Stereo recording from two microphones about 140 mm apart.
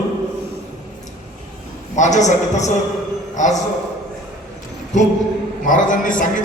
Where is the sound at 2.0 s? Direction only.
60° left (ahead or behind).